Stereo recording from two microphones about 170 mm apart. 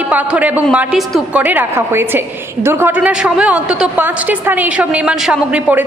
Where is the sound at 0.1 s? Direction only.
10° right (ahead or behind).